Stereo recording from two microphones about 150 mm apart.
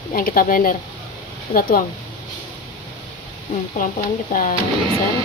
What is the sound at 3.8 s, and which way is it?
Speech, 65° left (ahead or behind).